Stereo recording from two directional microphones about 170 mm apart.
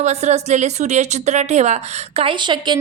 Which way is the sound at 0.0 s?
40° right (ahead or behind).